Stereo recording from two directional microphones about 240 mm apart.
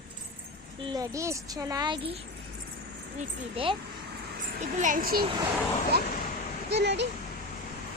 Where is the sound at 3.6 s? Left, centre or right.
Right.